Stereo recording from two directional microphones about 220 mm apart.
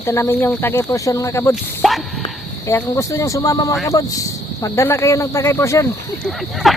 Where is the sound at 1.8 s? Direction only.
Centre (ahead or behind).